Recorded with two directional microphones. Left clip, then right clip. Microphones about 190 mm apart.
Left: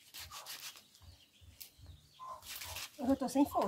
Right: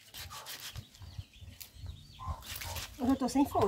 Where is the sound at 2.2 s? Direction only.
55° right (ahead or behind).